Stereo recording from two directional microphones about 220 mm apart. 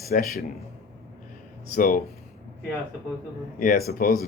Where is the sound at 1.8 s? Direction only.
40° left (ahead or behind).